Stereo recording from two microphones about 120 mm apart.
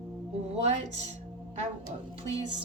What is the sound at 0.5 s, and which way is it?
Speech, 65° right (ahead or behind).